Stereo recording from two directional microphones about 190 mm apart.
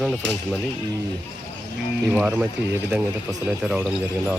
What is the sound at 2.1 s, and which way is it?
Speech, 10° right (ahead or behind).